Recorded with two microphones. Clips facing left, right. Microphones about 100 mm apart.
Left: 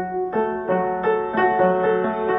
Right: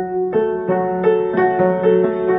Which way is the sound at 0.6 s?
5° right (ahead or behind).